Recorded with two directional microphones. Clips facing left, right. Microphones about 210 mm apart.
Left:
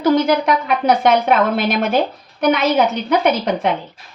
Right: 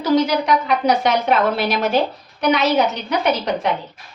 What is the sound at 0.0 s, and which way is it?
Speech, 55° left (ahead or behind).